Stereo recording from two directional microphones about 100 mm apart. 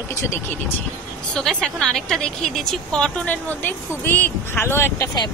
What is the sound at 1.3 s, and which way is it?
A woman's voice, 5° left (ahead or behind).